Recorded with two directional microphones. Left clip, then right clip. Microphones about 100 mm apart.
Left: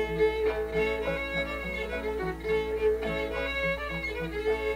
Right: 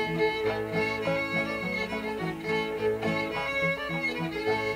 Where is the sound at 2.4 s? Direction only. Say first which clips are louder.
Left 2 dB; 35° right (ahead or behind).